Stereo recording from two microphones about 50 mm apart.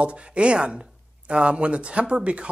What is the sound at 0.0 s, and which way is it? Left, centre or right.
Speech, right.